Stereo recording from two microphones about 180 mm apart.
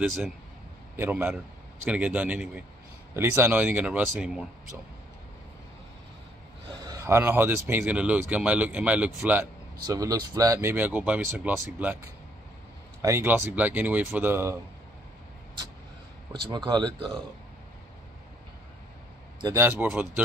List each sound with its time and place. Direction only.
0.9 s speech: 10° right (ahead or behind)
6.7 s speech: 20° right (ahead or behind)
9.8 s speech: 20° right (ahead or behind)
16.4 s speech: 25° right (ahead or behind)
19.4 s speech: 15° right (ahead or behind)